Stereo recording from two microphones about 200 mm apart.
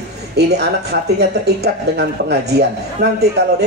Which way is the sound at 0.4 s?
55° right (ahead or behind).